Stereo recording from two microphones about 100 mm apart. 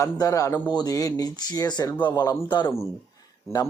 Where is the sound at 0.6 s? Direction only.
45° left (ahead or behind).